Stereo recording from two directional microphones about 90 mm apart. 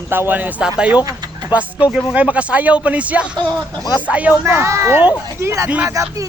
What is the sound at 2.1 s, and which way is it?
Speech, 15° right (ahead or behind).